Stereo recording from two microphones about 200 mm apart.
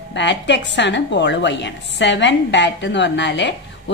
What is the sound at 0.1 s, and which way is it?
A woman's voice, 60° left (ahead or behind).